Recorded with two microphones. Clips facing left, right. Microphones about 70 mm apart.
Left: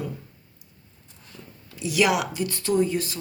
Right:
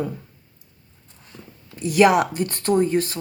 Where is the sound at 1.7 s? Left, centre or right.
Right.